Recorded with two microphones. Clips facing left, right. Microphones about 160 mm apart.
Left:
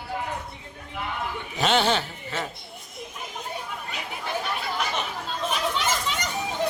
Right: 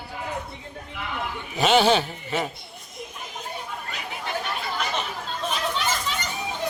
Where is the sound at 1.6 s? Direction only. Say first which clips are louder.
Right 4 dB; 10° right (ahead or behind).